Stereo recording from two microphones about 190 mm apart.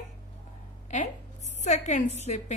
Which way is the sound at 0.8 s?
40° left (ahead or behind).